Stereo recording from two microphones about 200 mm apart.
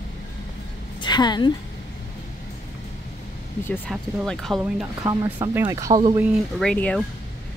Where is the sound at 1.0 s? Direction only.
20° left (ahead or behind).